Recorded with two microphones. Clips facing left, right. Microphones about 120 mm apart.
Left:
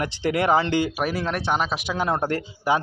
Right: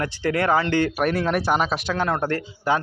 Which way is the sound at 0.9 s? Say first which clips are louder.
Right 4 dB; centre (ahead or behind).